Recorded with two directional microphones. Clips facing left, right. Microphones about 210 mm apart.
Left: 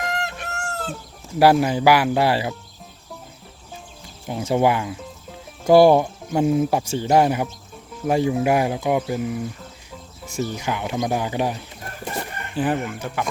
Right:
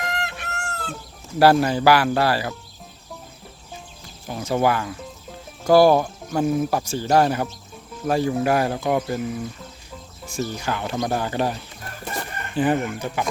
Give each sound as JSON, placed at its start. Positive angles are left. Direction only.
{"t": 0.1, "sound": "chicken", "side_deg": 45}
{"t": 1.4, "sound": "speech", "side_deg": 15}
{"t": 4.3, "sound": "speech", "side_deg": 20}
{"t": 10.3, "sound": "speech", "side_deg": 20}
{"t": 12.0, "sound": "chicken", "side_deg": 5}
{"t": 12.7, "sound": "speech", "side_deg": 0}